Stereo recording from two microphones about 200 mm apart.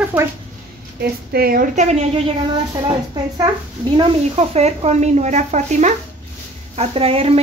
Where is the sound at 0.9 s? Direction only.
50° right (ahead or behind); by 2.2 s 35° right (ahead or behind).